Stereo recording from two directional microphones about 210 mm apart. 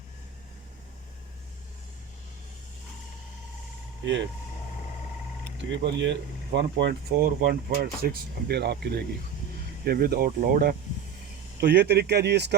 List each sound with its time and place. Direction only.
4.0 s speech: 60° right (ahead or behind)
5.8 s speech: 55° right (ahead or behind)